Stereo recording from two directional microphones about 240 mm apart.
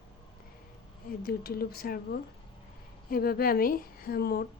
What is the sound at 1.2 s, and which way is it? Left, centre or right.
Speech, left.